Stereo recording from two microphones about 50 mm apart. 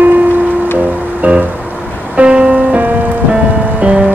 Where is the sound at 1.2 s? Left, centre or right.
Right.